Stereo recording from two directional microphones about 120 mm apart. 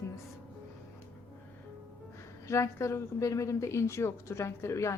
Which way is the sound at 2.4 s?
25° left (ahead or behind).